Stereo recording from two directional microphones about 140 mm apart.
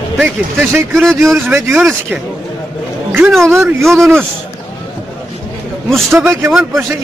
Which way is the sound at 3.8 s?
Centre (ahead or behind).